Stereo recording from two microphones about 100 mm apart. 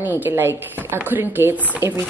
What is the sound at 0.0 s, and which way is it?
A woman's voice, 20° right (ahead or behind).